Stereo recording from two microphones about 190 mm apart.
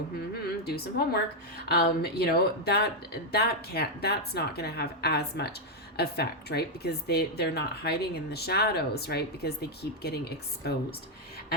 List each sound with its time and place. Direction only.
0.6 s a woman's voice: 55° left (ahead or behind)